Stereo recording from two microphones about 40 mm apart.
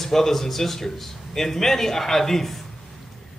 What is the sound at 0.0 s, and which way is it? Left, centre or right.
Speech, centre.